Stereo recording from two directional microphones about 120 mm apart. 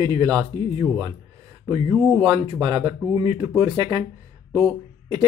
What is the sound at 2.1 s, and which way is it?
Speech, 35° right (ahead or behind).